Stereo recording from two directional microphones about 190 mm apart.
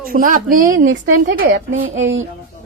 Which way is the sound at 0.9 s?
75° right (ahead or behind).